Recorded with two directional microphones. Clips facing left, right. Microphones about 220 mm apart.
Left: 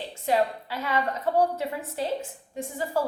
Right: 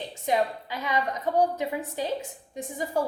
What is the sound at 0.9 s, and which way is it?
A woman's voice, 15° right (ahead or behind).